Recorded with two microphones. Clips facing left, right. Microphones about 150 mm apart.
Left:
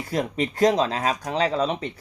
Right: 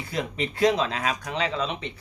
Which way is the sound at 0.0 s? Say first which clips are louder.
Left 4 dB; 45° left (ahead or behind).